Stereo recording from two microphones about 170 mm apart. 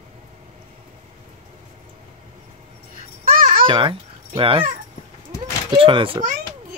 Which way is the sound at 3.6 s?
30° right (ahead or behind).